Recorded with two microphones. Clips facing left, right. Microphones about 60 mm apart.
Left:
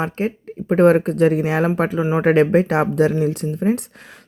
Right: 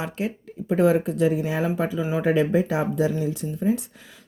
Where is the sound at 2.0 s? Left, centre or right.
Left.